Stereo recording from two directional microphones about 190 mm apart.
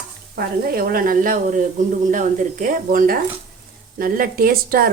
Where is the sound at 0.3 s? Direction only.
55° right (ahead or behind).